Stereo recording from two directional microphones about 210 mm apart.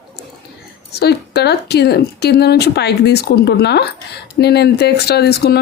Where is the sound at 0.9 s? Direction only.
50° left (ahead or behind).